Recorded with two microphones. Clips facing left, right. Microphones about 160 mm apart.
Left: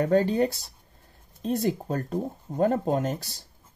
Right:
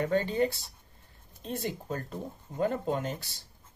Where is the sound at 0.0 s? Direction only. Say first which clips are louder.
Left 5 dB; 40° left (ahead or behind).